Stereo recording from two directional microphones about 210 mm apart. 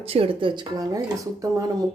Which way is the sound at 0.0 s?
25° right (ahead or behind).